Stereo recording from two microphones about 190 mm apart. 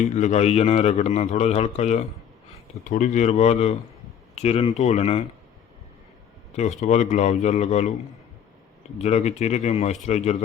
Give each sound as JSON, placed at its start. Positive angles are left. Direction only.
{"t": 0.0, "sound": "a man's voice", "side_deg": 35}
{"t": 6.6, "sound": "a man's voice", "side_deg": 40}
{"t": 9.0, "sound": "a man's voice", "side_deg": 35}